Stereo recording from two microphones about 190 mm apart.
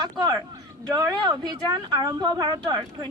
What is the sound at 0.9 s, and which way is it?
Speech, 20° right (ahead or behind).